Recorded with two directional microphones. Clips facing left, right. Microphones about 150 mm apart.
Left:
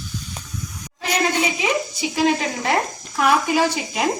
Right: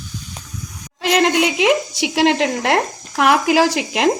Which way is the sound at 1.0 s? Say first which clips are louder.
Right 6 dB; 90° right.